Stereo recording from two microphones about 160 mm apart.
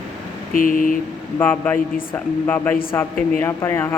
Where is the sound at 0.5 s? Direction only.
60° left (ahead or behind).